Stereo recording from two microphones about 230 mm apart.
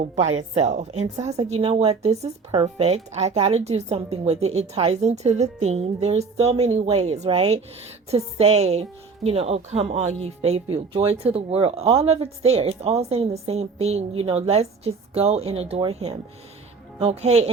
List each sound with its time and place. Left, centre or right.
0.2 s a woman's voice: right